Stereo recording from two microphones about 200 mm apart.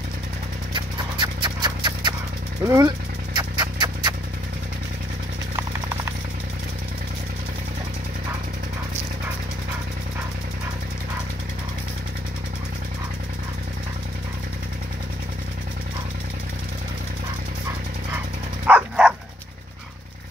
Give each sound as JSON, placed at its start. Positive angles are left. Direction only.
{"t": 0.7, "sound": "horse", "side_deg": -25}
{"t": 2.6, "sound": "speech", "side_deg": -15}
{"t": 3.3, "sound": "a sound", "side_deg": -20}
{"t": 18.7, "sound": "bow-wow", "side_deg": -5}